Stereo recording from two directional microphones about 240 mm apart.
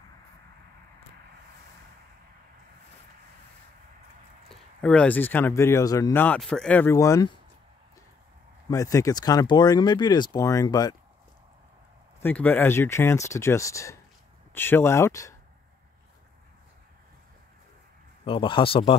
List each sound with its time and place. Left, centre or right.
4.5 s speech: centre
8.6 s speech: centre
12.2 s speech: centre
18.2 s speech: left